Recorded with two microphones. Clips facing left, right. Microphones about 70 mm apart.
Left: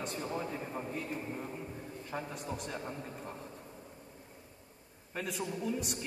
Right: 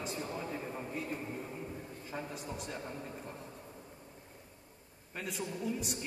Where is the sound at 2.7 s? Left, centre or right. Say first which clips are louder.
Left 1 dB; centre.